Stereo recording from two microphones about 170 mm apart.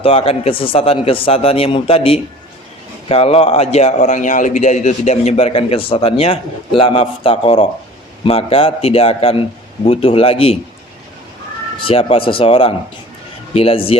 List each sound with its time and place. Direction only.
0.0 s a man's voice: 35° left (ahead or behind)
11.8 s a man's voice: 35° left (ahead or behind)